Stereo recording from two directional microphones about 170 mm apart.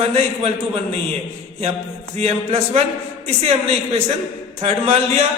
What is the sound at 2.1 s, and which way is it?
A man's voice, 35° right (ahead or behind).